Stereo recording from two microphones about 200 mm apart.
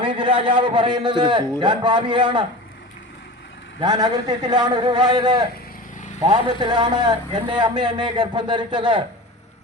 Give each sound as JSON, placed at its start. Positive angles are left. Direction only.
{"t": 0.0, "sound": "a man's voice", "side_deg": -25}
{"t": 3.8, "sound": "a man's voice", "side_deg": -20}
{"t": 6.6, "sound": "a man's voice", "side_deg": -20}